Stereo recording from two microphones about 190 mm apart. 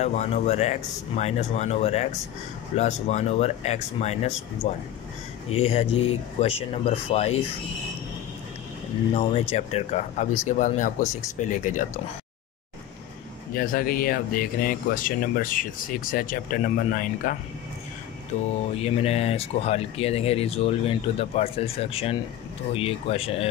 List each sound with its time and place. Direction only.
0.0 s speech: 35° left (ahead or behind)
9.1 s speech: 35° left (ahead or behind)
13.6 s speech: 50° left (ahead or behind)
18.8 s speech: 30° left (ahead or behind)